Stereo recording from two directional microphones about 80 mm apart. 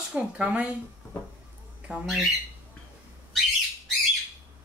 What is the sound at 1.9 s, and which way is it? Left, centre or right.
Speech, right.